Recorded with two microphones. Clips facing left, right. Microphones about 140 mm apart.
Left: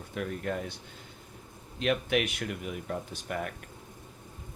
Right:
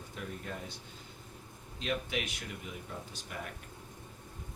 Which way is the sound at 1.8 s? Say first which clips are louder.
Left 8 dB; 65° left (ahead or behind).